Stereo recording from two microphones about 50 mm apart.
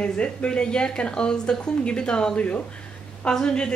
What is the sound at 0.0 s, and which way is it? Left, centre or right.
A woman's voice, left.